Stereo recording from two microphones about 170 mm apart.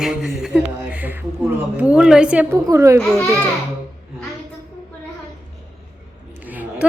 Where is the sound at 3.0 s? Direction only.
5° left (ahead or behind).